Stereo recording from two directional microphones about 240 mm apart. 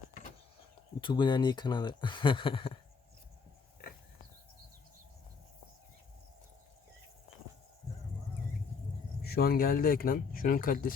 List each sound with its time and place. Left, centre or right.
1.0 s speech: centre
9.2 s speech: left